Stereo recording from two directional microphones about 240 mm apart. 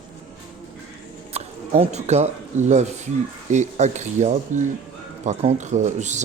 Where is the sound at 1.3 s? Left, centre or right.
Right.